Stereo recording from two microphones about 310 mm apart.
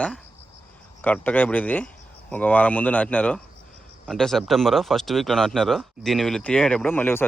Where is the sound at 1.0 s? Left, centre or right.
Centre.